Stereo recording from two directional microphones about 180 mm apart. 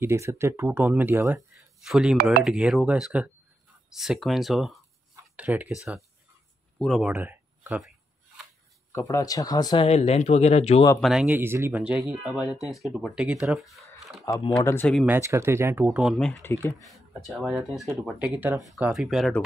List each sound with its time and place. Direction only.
0.0 s speech: 15° right (ahead or behind)
6.8 s speech: centre (ahead or behind)
8.9 s speech: 15° left (ahead or behind)
9.8 s speech: 35° left (ahead or behind)
11.0 s speech: centre (ahead or behind)
14.2 s speech: 20° left (ahead or behind)
15.0 s speech: 15° right (ahead or behind)